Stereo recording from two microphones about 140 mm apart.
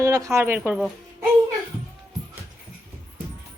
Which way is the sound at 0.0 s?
20° right (ahead or behind).